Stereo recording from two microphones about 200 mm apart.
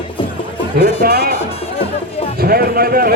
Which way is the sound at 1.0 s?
50° right (ahead or behind).